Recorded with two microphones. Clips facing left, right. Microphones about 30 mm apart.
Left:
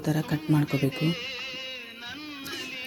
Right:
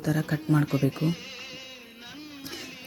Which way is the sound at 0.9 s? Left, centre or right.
Left.